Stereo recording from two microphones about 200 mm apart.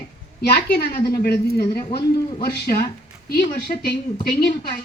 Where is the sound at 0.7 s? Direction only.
50° left (ahead or behind).